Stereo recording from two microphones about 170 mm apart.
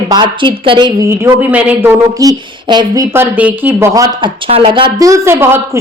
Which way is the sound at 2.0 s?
20° right (ahead or behind).